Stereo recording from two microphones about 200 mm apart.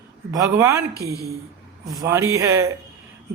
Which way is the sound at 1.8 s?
15° right (ahead or behind).